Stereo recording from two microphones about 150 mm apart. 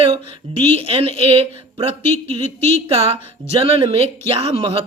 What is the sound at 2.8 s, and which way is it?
Speech, 40° right (ahead or behind).